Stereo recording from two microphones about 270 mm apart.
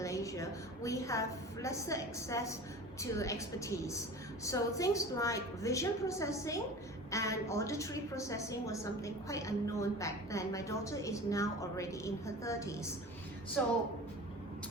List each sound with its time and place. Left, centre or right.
0.0 s a woman's voice: centre